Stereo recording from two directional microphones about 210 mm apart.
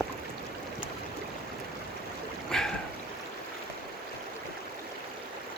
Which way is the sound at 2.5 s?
Centre (ahead or behind).